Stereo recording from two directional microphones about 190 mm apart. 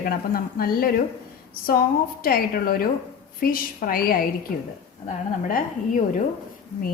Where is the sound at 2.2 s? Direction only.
50° left (ahead or behind).